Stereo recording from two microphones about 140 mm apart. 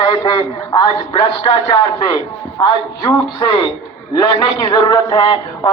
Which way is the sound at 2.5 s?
25° left (ahead or behind).